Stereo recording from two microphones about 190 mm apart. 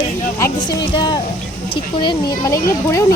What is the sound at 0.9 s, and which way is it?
Speech, 25° left (ahead or behind).